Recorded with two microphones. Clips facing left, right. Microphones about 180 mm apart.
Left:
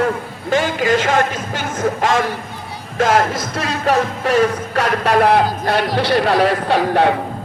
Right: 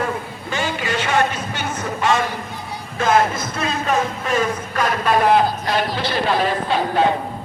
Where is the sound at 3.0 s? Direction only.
90° left; by 7.2 s 70° left (ahead or behind).